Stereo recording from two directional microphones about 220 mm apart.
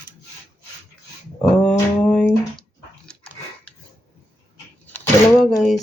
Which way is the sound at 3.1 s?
5° left (ahead or behind).